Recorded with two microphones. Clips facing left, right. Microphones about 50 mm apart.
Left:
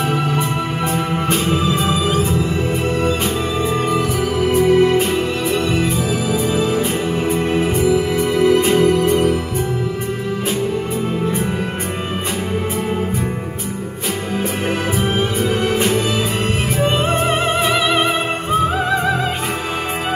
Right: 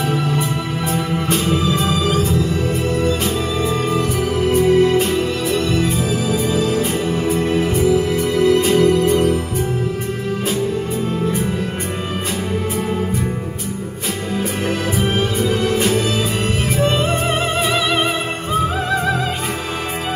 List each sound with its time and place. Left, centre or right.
1.3 s music: centre
3.6 s music: centre
8.5 s music: left
15.4 s music: centre
18.5 s opera: centre